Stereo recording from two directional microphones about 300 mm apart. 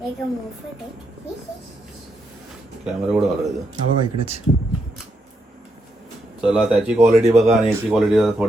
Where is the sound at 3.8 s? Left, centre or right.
Right.